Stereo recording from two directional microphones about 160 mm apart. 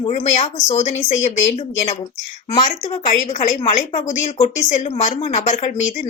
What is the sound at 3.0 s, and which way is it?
Speech, 50° left (ahead or behind).